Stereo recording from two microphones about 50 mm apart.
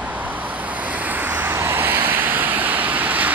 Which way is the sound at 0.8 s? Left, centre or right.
Right.